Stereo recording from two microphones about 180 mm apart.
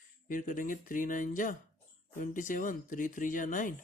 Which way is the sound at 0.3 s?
50° left (ahead or behind).